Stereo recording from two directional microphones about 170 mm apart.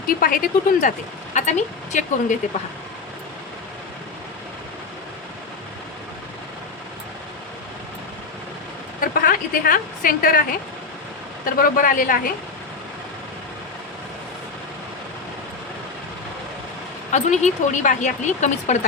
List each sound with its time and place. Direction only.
0.1 s a woman's voice: 55° left (ahead or behind)
9.0 s a woman's voice: 55° left (ahead or behind)
11.4 s a woman's voice: 55° left (ahead or behind)
17.1 s a woman's voice: 45° left (ahead or behind)